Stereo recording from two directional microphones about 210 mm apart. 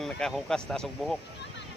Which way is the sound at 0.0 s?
Centre (ahead or behind).